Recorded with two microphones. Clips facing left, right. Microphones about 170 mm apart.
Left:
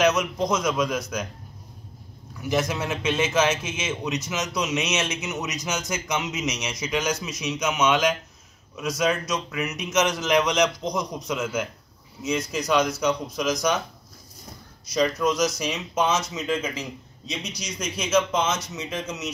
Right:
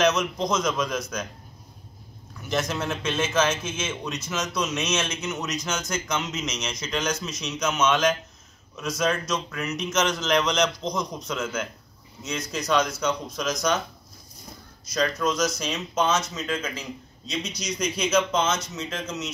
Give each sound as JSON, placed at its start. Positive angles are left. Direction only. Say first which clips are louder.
{"t": 0.0, "sound": "a man's voice", "louder": "left 1 dB", "side_deg": 10}
{"t": 2.7, "sound": "a man's voice", "louder": "left 2 dB", "side_deg": 10}
{"t": 15.0, "sound": "a man's voice", "louder": "left 2 dB", "side_deg": 15}